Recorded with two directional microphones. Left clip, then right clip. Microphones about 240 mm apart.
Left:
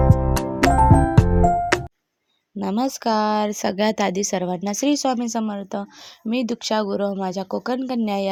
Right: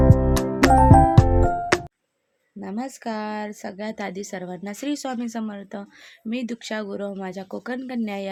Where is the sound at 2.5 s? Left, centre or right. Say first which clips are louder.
Left 8 dB; left.